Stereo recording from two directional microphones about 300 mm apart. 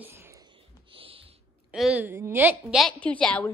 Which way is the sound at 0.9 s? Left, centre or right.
Centre.